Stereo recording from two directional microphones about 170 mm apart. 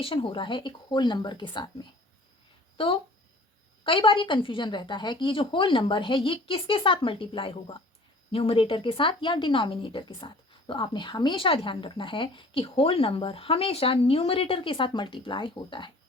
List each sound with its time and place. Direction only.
0.0 s a woman's voice: 30° left (ahead or behind)